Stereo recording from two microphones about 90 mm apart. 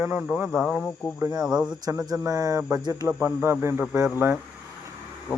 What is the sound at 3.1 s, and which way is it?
Speech, 25° right (ahead or behind).